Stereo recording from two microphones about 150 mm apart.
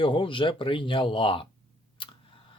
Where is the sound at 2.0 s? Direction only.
35° left (ahead or behind).